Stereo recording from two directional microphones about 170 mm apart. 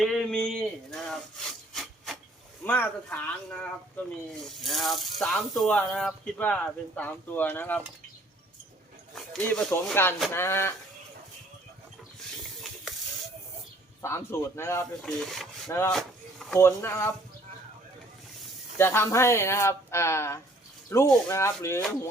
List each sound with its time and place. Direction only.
0.0 s a sound: 5° left (ahead or behind)
2.6 s speech: 10° left (ahead or behind)
9.1 s speech: 5° left (ahead or behind)
14.0 s speech: 15° left (ahead or behind)
15.0 s speech: centre (ahead or behind)
15.9 s vehicle: centre (ahead or behind)
16.6 s speech: 15° left (ahead or behind)
18.8 s speech: 15° left (ahead or behind)